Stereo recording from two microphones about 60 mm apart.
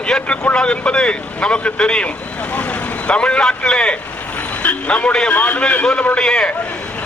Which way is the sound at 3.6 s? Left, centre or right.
Centre.